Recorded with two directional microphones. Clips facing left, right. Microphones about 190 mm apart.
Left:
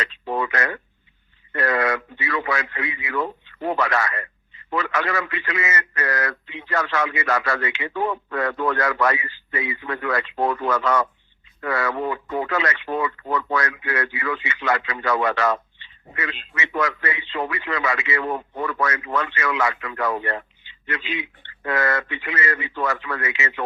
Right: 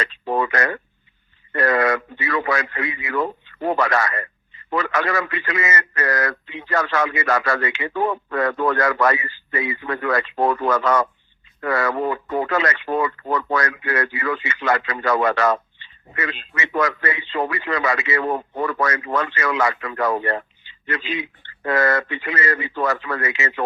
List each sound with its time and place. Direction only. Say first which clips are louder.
0.0 s a man's voice: right 3 dB; 40° right (ahead or behind)